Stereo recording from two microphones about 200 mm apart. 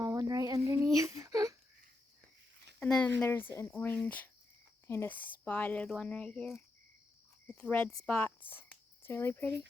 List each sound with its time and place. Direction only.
0.0 s child singing: 20° right (ahead or behind)
2.7 s a sound: 5° left (ahead or behind)
3.2 s speech: 10° left (ahead or behind)